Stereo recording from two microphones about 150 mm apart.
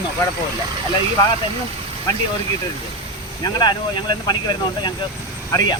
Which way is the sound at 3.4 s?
30° left (ahead or behind).